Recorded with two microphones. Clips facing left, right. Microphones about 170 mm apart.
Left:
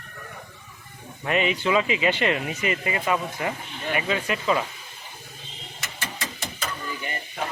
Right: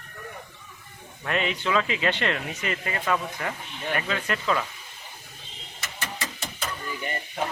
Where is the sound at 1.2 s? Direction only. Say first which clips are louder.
Left 4 dB; 5° left (ahead or behind).